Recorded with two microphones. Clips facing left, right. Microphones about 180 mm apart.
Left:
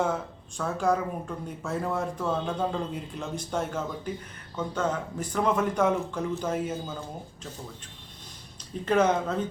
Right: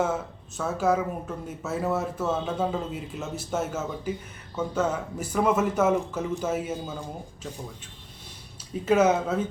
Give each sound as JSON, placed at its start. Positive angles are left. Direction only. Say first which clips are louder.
{"t": 0.0, "sound": "a man's voice", "louder": "right 1 dB", "side_deg": -5}
{"t": 8.8, "sound": "speech", "louder": "right 2 dB", "side_deg": -5}